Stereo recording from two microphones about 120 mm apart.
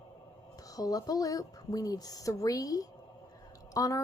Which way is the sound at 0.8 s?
30° left (ahead or behind).